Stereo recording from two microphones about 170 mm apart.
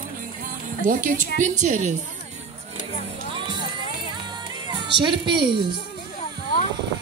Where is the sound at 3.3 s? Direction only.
30° right (ahead or behind).